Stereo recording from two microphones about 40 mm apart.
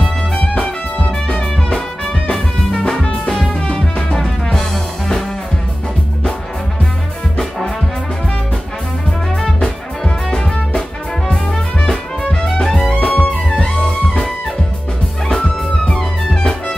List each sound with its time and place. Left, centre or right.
0.0 s music: left
3.0 s music: centre
9.6 s music: centre
13.0 s music: left
16.0 s music: centre